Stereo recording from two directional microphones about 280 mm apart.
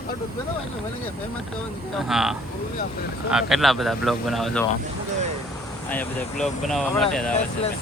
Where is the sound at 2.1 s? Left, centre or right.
Centre.